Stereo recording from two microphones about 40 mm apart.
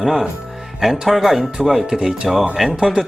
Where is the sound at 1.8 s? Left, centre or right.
Centre.